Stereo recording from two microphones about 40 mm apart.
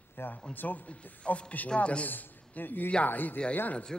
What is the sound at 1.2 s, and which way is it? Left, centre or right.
Speech, left.